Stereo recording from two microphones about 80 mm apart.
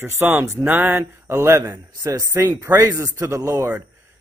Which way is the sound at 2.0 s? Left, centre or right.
Right.